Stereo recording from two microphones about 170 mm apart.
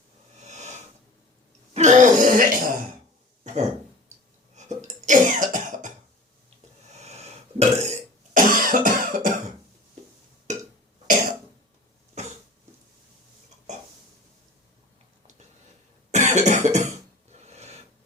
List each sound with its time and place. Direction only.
0.4 s wheeze: 40° right (ahead or behind)
1.7 s speech: 45° right (ahead or behind)
3.4 s a sound: 45° right (ahead or behind)
4.6 s hiccup: 45° right (ahead or behind)
5.0 s cough: 50° right (ahead or behind)
6.9 s burping: 40° right (ahead or behind)
12.2 s cough: 40° right (ahead or behind)
16.1 s cough: 45° right (ahead or behind)
17.3 s a sound: 40° right (ahead or behind)